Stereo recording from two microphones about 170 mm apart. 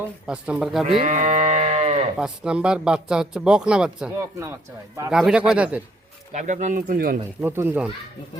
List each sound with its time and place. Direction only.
0.0 s speech: 5° right (ahead or behind)
1.0 s livestock: 45° right (ahead or behind)
2.1 s speech: 5° right (ahead or behind)
4.2 s speech: 20° right (ahead or behind)
5.1 s speech: 5° right (ahead or behind)
6.3 s speech: 45° right (ahead or behind)
7.4 s speech: 15° right (ahead or behind)